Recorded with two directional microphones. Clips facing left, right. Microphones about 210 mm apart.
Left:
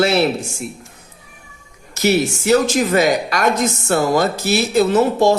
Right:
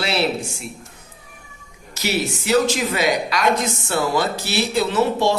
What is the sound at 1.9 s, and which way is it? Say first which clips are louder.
Speech: left 7 dB; 45° left (ahead or behind).